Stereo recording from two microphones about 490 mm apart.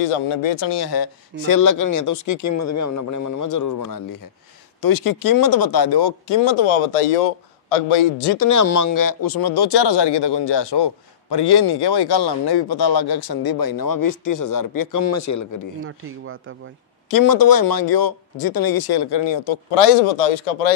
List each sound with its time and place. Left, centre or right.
0.0 s speech: left
8.2 s speech: left
15.8 s speech: right
17.1 s speech: left